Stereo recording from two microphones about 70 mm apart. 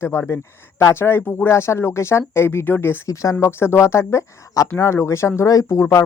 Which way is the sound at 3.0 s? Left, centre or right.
Left.